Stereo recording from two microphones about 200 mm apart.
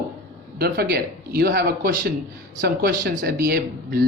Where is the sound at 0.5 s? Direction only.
50° right (ahead or behind).